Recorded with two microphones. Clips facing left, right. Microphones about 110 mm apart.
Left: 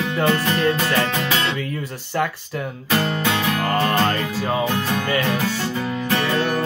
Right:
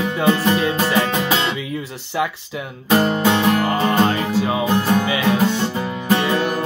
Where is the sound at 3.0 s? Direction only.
20° right (ahead or behind).